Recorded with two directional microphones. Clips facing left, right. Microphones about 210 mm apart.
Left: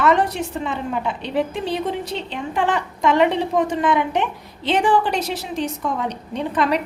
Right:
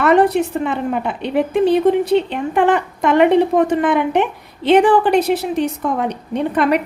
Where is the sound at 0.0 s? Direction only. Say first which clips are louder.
Right 6 dB; 60° right (ahead or behind).